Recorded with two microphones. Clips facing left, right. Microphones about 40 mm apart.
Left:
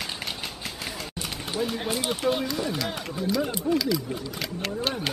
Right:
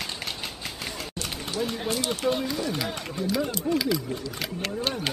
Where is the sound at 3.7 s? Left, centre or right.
Centre.